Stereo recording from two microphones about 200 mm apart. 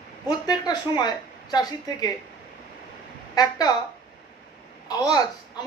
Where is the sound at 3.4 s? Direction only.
20° left (ahead or behind).